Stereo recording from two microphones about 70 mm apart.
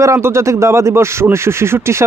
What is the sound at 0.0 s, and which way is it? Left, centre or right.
Speech, right.